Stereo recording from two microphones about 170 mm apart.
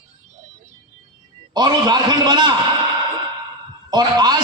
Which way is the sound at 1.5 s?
25° right (ahead or behind).